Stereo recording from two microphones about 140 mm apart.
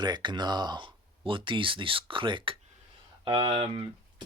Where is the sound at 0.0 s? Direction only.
30° right (ahead or behind).